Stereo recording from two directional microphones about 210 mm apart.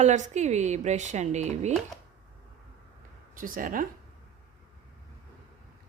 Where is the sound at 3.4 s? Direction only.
40° right (ahead or behind).